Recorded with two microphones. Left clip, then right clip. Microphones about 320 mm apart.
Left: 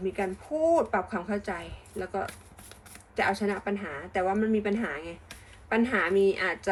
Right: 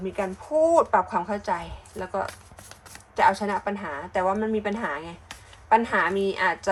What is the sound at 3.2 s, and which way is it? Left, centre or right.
Speech, right.